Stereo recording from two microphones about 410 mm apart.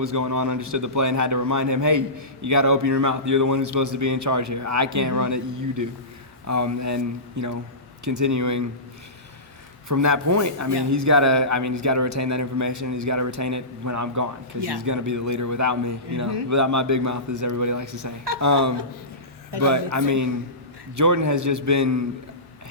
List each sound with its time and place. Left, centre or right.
0.0 s a man's voice: right
9.9 s a man's voice: right